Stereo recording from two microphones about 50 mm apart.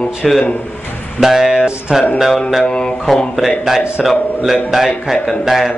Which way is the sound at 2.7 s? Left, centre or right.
Centre.